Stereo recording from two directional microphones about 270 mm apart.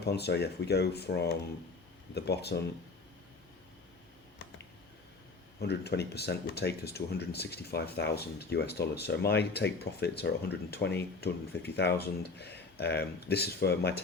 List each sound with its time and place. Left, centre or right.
0.0 s speech: left
5.5 s speech: left